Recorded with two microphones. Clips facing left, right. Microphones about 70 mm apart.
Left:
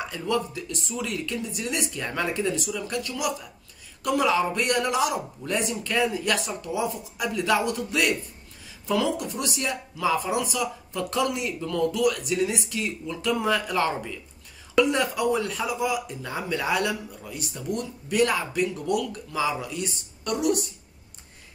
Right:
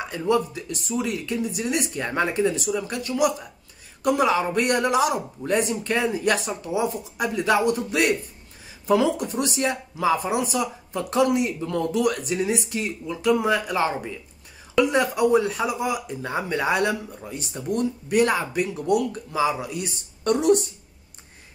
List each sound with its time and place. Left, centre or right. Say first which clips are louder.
0.1 s speech: right 6 dB; right
20.2 s a woman's voice: right 6 dB; right